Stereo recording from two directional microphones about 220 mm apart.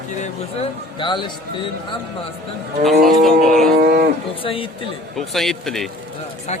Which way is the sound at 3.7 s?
45° right (ahead or behind).